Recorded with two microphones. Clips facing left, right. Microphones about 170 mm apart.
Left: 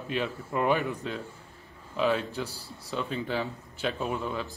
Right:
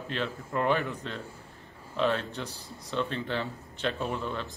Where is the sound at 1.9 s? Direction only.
5° left (ahead or behind).